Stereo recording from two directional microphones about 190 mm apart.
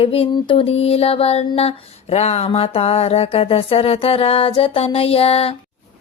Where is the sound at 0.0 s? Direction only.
30° left (ahead or behind).